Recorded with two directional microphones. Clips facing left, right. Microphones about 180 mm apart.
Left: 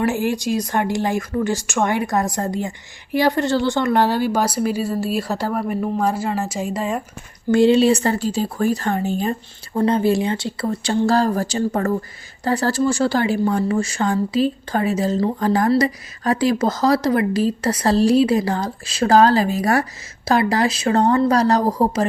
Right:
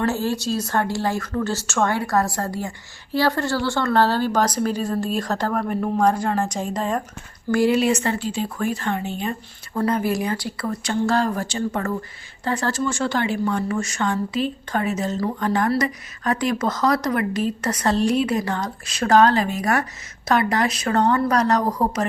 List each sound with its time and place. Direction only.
0.0 s speech: 15° left (ahead or behind)
7.5 s speech: 25° left (ahead or behind)
9.7 s speech: 25° left (ahead or behind)